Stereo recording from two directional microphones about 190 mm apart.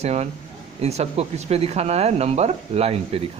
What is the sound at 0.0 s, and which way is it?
A man's voice, 35° right (ahead or behind).